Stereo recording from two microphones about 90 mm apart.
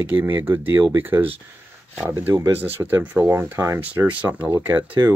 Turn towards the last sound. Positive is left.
turn(degrees=-20)  # may be behind; listen again after turning